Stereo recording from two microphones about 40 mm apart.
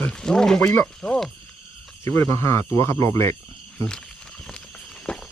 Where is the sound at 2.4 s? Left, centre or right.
Left.